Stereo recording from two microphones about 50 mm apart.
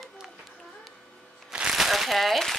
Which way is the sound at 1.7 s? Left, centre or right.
Centre.